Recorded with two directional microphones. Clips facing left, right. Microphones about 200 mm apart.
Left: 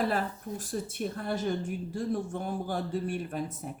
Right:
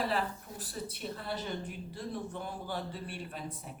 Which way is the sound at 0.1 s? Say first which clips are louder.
Left 3 dB; 45° left (ahead or behind).